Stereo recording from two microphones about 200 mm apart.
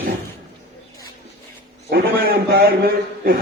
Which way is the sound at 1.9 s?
50° right (ahead or behind).